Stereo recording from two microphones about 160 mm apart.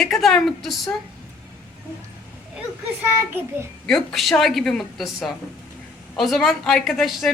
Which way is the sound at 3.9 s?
Centre (ahead or behind).